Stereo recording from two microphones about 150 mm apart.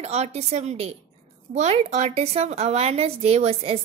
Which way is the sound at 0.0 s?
45° right (ahead or behind).